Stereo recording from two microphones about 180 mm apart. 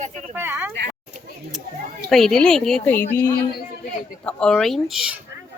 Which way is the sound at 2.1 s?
Centre (ahead or behind).